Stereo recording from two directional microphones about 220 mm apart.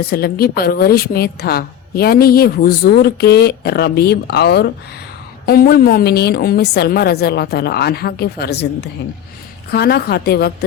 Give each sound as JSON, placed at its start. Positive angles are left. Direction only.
{"t": 0.0, "sound": "a woman's voice", "side_deg": 45}
{"t": 9.7, "sound": "a woman's voice", "side_deg": 45}